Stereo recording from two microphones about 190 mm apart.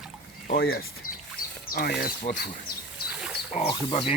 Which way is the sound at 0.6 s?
55° left (ahead or behind).